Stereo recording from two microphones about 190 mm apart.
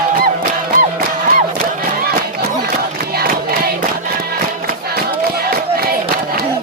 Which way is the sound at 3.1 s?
50° right (ahead or behind).